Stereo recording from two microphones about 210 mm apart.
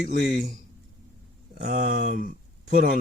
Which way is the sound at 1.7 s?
35° right (ahead or behind).